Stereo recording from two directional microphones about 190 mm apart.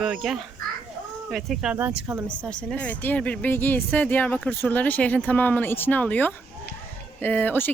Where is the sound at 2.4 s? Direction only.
5° left (ahead or behind).